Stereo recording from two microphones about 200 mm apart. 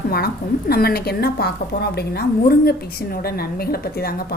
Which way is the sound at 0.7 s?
50° left (ahead or behind).